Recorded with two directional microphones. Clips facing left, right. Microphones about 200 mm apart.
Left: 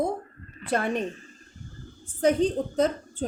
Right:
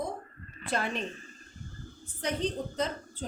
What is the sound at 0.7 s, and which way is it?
Speech, 55° left (ahead or behind).